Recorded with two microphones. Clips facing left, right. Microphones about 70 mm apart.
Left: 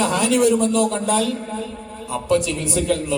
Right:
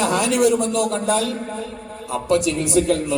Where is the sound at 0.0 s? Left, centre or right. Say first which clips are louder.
Even; right.